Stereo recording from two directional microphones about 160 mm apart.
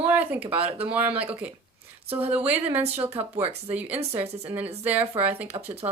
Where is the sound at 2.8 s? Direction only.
40° right (ahead or behind).